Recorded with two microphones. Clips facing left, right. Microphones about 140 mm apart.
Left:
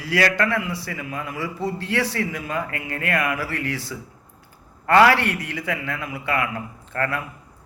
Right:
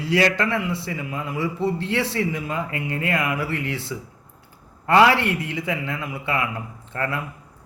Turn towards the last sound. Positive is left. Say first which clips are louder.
# left 1 dB
turn(degrees=-20)  # may be behind; listen again after turning